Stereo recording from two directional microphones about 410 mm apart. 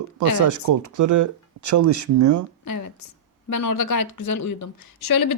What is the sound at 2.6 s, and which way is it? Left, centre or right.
A woman's voice, left.